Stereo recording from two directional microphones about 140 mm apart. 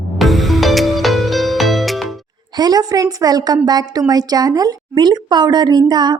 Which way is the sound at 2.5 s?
30° right (ahead or behind).